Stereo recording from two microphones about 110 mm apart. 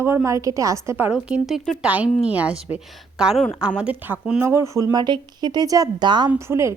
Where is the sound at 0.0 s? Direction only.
20° right (ahead or behind).